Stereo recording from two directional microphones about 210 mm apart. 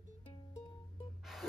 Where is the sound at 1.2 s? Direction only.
Centre (ahead or behind).